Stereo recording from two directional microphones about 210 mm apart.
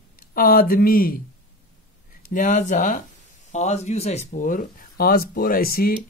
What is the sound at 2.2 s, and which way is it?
Speech, 35° left (ahead or behind).